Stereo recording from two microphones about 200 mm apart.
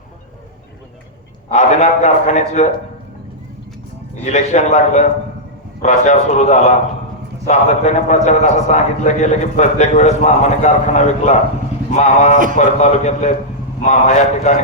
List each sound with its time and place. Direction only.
1.5 s a man's voice: 35° left (ahead or behind)
4.3 s a man's voice: 35° left (ahead or behind)